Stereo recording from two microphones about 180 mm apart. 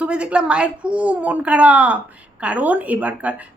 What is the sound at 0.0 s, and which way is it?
Speech, 5° right (ahead or behind).